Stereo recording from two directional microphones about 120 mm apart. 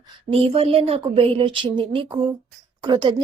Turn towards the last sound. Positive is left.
turn(degrees=-35)  # may be behind; listen again after turning